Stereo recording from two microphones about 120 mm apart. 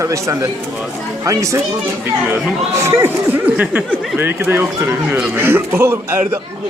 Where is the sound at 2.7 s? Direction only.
25° right (ahead or behind).